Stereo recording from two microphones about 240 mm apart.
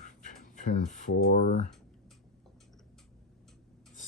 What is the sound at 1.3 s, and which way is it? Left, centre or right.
Speech, left.